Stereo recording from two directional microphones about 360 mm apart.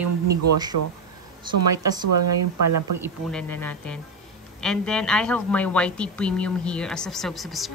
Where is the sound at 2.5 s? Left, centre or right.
Right.